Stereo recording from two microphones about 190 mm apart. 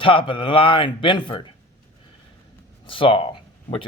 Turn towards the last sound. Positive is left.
turn(degrees=30)  # may be behind; listen again after turning